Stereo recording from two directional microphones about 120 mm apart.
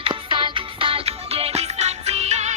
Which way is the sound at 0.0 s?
45° right (ahead or behind).